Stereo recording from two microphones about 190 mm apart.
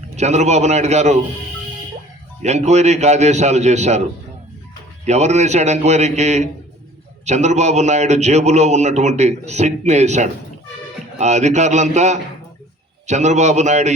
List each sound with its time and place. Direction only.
0.2 s a man's voice: 35° right (ahead or behind)
2.4 s a man's voice: 35° right (ahead or behind)
5.0 s a man's voice: 35° right (ahead or behind)